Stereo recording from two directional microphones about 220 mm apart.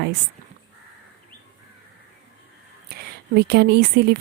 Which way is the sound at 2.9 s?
45° right (ahead or behind).